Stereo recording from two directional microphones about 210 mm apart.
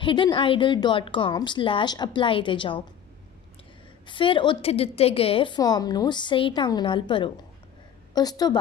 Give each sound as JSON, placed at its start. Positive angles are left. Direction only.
{"t": 0.0, "sound": "a woman's voice", "side_deg": 25}
{"t": 4.0, "sound": "a woman's voice", "side_deg": 25}